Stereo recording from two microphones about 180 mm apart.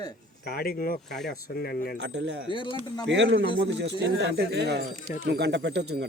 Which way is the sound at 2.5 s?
25° left (ahead or behind).